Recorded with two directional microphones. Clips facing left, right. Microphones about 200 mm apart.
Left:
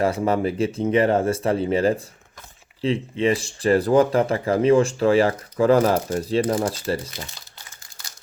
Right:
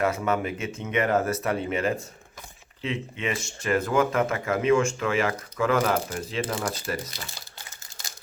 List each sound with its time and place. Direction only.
0.0 s speech: 35° left (ahead or behind)